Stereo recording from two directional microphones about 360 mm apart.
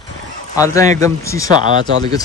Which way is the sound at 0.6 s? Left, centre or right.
Centre.